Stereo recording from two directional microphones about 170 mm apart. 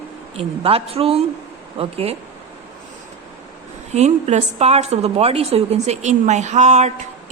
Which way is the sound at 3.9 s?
40° right (ahead or behind).